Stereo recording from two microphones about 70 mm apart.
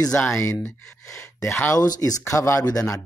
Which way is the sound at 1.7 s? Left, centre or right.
Left.